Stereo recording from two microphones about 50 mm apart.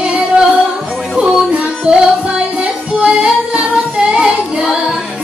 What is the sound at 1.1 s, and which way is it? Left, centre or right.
Music, centre.